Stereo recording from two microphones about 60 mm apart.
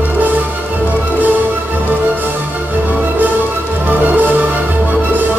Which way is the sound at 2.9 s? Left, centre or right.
Right.